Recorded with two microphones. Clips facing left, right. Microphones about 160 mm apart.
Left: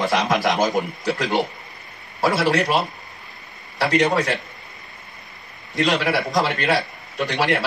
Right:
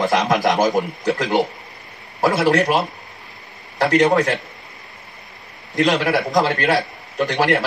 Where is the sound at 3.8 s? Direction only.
45° right (ahead or behind).